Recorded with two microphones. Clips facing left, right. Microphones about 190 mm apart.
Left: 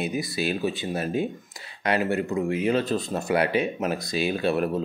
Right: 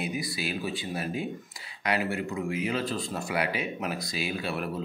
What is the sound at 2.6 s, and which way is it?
Speech, 25° left (ahead or behind).